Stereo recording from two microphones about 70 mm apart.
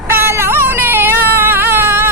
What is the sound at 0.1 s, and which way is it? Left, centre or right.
Baby cry, right.